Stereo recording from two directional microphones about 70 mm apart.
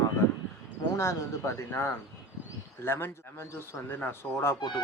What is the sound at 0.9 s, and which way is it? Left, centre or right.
Speech, left.